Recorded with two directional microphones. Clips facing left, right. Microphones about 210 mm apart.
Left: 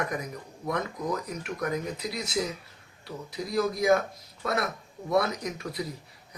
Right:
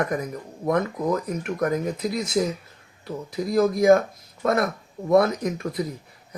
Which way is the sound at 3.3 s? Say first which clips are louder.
Right 7 dB; 50° right (ahead or behind).